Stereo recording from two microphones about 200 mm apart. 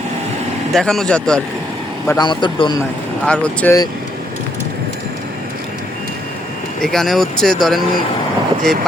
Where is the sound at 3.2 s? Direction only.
5° left (ahead or behind).